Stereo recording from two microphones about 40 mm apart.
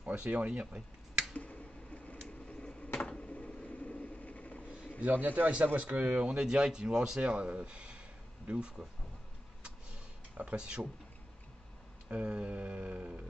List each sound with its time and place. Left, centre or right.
0.0 s speech: right
1.3 s finger snapping: left
3.0 s a sound: left
5.0 s a man's voice: right
5.8 s speech: right
6.4 s speech: centre
7.2 s speech: right
10.3 s speech: right
12.1 s speech: right